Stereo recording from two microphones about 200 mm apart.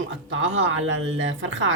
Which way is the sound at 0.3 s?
75° right (ahead or behind).